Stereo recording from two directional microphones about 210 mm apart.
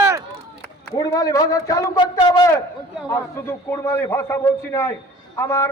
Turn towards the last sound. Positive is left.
turn(degrees=10)  # may be behind; listen again after turning